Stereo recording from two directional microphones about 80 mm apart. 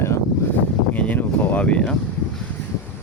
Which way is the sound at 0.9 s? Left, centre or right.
Centre.